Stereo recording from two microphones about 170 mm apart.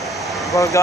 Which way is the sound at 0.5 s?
20° left (ahead or behind).